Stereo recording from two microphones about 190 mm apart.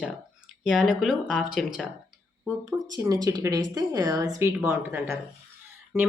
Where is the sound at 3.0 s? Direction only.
20° right (ahead or behind).